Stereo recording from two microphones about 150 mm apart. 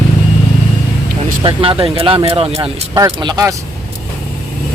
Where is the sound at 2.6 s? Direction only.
25° right (ahead or behind).